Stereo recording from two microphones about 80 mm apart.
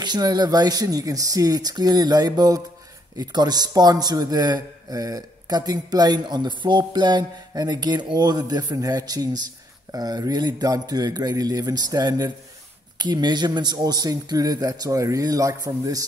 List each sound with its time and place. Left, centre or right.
0.0 s a man's voice: right